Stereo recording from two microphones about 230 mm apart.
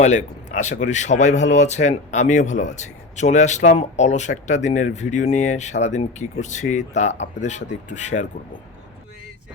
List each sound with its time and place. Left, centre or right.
0.0 s speech: left